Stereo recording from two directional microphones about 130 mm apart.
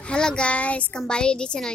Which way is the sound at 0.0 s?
5° left (ahead or behind).